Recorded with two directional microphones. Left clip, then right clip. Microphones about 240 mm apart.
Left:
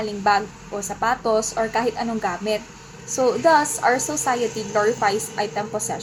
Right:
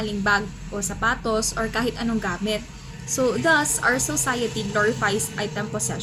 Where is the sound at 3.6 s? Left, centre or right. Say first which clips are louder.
Left 2 dB; centre.